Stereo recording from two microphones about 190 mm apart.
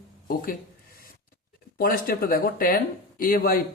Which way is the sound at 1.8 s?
50° left (ahead or behind).